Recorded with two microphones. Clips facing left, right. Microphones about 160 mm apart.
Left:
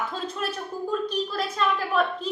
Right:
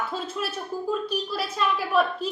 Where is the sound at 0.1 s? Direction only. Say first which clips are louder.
Even; 5° right (ahead or behind).